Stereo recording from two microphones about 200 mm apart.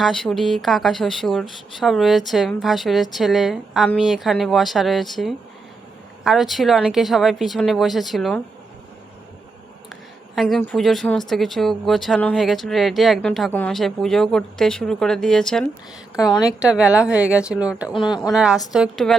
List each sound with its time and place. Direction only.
0.0 s speech: 5° left (ahead or behind)
9.9 s a sound: centre (ahead or behind)
10.6 s speech: 5° left (ahead or behind)
17.9 s speech: 25° left (ahead or behind)
18.3 s speech: 5° right (ahead or behind)